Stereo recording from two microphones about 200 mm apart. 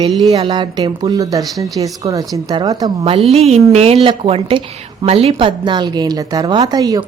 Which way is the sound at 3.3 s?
30° right (ahead or behind).